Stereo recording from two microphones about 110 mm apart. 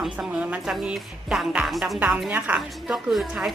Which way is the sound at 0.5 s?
5° right (ahead or behind).